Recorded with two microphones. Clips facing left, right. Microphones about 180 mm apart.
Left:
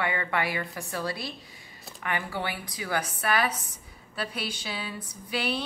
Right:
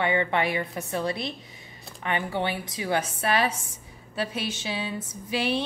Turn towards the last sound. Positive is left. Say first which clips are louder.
# right 4 dB
turn(degrees=-25)  # may be behind; listen again after turning